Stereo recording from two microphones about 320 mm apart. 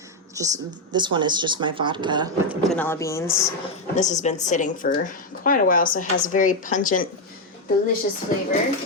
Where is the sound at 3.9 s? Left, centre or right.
Left.